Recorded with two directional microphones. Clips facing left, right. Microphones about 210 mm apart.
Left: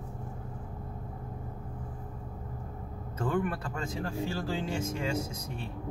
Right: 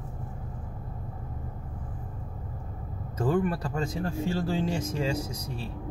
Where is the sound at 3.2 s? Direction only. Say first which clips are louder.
Right 4 dB; 40° right (ahead or behind).